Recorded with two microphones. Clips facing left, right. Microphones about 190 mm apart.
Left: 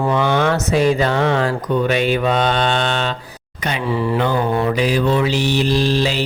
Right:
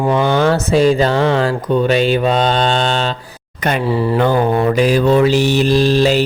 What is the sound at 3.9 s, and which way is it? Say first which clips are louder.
Mantra: even; 30° right (ahead or behind).